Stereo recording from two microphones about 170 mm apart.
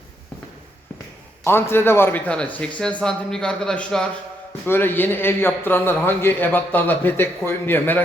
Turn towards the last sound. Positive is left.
turn(degrees=10)  # may be behind; listen again after turning